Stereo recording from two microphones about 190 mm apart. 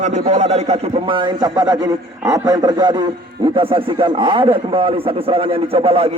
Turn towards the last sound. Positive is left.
turn(degrees=-30)  # may be behind; listen again after turning